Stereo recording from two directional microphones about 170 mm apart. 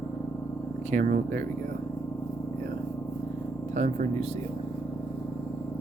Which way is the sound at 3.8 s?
45° right (ahead or behind).